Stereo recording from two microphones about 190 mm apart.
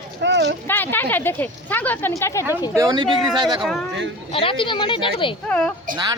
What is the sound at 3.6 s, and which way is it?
Speech, centre (ahead or behind).